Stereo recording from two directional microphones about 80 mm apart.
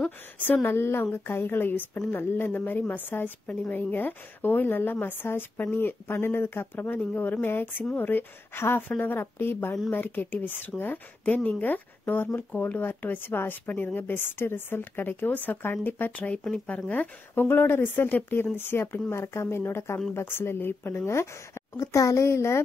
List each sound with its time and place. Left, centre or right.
0.4 s speech: left
3.4 s speech: centre
3.9 s speech: left